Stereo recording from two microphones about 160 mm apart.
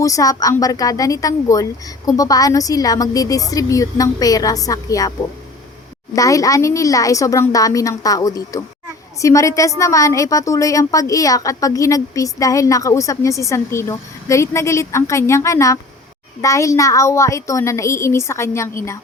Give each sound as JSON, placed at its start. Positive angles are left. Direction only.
{"t": 0.0, "sound": "a woman's voice", "side_deg": 20}
{"t": 6.1, "sound": "a woman's voice", "side_deg": 20}